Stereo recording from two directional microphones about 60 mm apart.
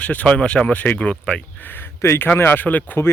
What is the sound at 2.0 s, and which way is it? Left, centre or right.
Speech, left.